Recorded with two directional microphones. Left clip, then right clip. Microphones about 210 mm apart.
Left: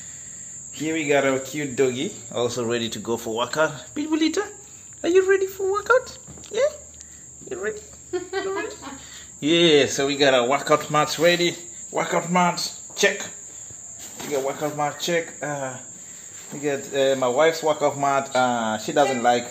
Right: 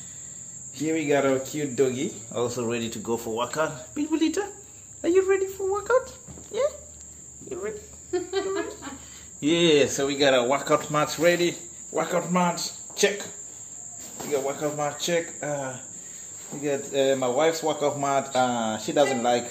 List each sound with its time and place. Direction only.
0.7 s speech: 10° left (ahead or behind)
5.0 s a sound: 25° left (ahead or behind)
7.4 s cricket: 25° left (ahead or behind)
9.4 s speech: 20° left (ahead or behind)
14.6 s speech: 25° left (ahead or behind)